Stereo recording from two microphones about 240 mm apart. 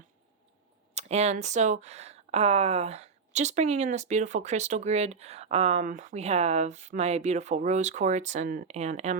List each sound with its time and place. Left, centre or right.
0.9 s speech: right